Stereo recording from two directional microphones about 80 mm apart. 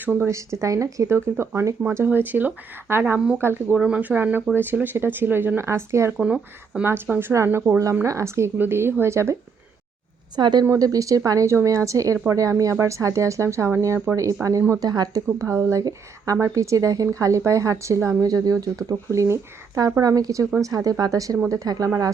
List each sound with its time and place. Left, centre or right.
0.0 s speech: right
0.3 s speech: right
1.1 s speech: right
3.8 s speech: centre; by 6.1 s right
6.1 s speech: centre
6.8 s speech: right
8.0 s speech: right
8.5 s speech: right
10.3 s a woman's voice: right
10.8 s speech: right
14.8 s speech: right
15.4 s speech: right
18.2 s speech: right